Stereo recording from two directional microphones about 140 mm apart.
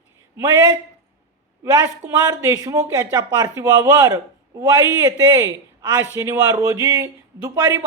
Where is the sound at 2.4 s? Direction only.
20° right (ahead or behind).